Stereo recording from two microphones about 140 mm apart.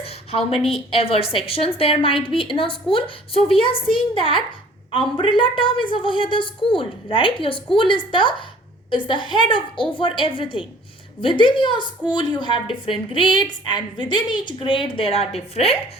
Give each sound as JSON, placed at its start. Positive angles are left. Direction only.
{"t": 0.0, "sound": "a woman's voice", "side_deg": 45}